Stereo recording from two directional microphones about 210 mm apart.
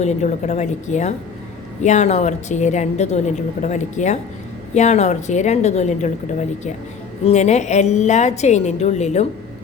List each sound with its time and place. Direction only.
0.0 s a woman's voice: 35° left (ahead or behind)
7.3 s a woman's voice: 35° left (ahead or behind)